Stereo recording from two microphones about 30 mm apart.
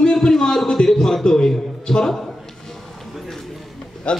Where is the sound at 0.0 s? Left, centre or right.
Left.